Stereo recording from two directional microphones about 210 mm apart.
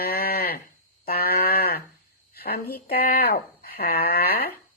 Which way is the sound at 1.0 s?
45° left (ahead or behind).